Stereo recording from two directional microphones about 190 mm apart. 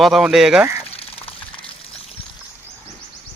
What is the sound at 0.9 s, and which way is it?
Water, 30° left (ahead or behind).